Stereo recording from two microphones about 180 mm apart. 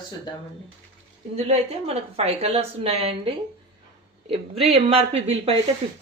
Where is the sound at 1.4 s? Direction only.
35° right (ahead or behind).